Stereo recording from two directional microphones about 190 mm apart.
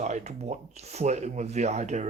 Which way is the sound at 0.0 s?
35° right (ahead or behind).